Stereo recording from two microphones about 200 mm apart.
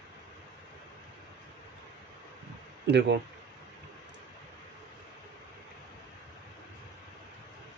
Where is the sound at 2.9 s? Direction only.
60° right (ahead or behind).